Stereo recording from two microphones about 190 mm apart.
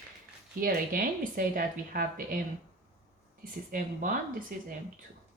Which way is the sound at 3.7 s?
45° right (ahead or behind).